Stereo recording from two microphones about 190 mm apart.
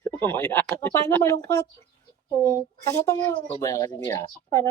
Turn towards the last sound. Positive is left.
turn(degrees=15)  # may be behind; listen again after turning